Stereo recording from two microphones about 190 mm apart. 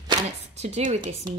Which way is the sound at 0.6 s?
35° right (ahead or behind).